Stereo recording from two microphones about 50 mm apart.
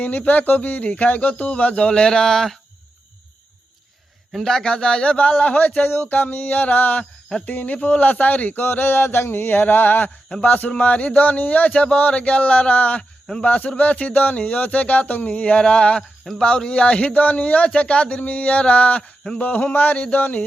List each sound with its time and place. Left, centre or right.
0.0 s speech: left; by 2.6 s centre
4.4 s speech: centre; by 7.0 s left
7.0 s speech: centre
7.4 s speech: left
8.6 s a sound: left
10.4 s speech: left